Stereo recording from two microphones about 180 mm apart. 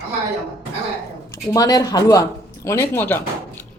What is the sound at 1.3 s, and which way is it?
Speech, 20° left (ahead or behind).